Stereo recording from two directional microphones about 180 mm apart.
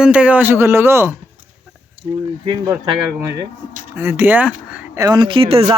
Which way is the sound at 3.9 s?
15° right (ahead or behind).